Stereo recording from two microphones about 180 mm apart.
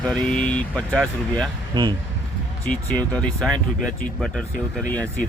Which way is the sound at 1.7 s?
25° right (ahead or behind).